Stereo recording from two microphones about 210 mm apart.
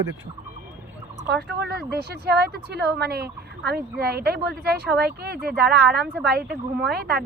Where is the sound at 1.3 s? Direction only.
55° right (ahead or behind).